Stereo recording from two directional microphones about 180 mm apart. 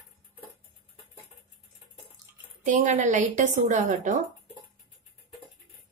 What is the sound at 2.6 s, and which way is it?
A woman's voice, 45° right (ahead or behind).